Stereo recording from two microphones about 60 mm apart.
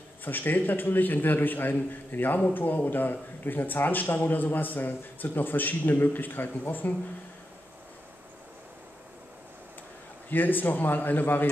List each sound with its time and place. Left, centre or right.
0.2 s a man's voice: left
10.3 s a man's voice: left